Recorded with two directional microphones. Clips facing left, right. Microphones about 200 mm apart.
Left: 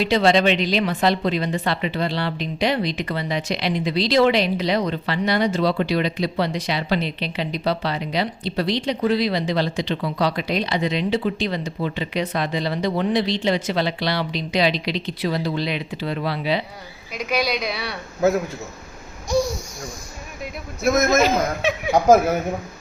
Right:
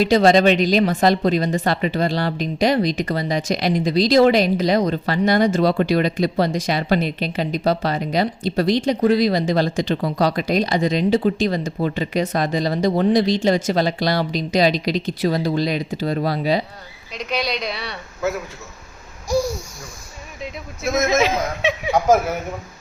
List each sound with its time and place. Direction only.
0.0 s a woman's voice: 45° right (ahead or behind)
17.1 s a woman's voice: 5° left (ahead or behind)
21.1 s a woman's voice: centre (ahead or behind)